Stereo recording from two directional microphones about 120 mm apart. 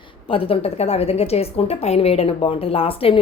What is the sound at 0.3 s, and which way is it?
A woman's voice, 50° left (ahead or behind).